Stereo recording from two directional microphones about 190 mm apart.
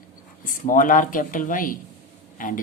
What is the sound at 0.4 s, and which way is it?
Speech, 45° left (ahead or behind).